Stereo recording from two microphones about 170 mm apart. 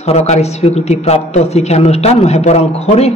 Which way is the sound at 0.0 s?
40° left (ahead or behind).